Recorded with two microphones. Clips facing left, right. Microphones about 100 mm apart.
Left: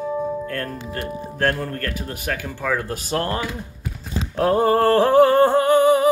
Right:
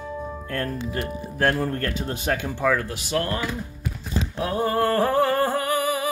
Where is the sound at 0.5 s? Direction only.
15° right (ahead or behind).